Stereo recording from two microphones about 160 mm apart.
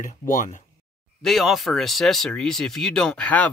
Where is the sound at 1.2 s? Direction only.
Centre (ahead or behind).